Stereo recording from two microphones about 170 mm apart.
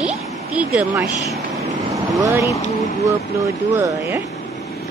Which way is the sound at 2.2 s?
15° right (ahead or behind).